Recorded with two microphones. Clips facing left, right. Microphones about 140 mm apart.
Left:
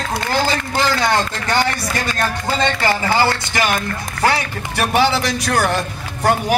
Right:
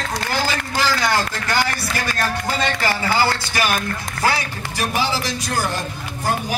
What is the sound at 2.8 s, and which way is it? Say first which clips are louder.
Speech: left 2 dB; 20° left (ahead or behind).